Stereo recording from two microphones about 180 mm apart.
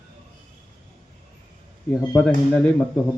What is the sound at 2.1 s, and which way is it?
Speech, 5° left (ahead or behind).